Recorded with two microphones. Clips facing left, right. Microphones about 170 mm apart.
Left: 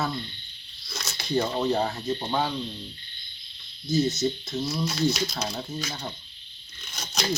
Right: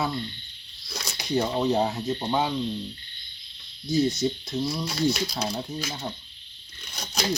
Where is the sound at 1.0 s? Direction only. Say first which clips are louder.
Even; 15° right (ahead or behind).